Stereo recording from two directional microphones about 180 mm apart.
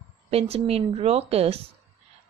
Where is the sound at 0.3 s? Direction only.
35° right (ahead or behind).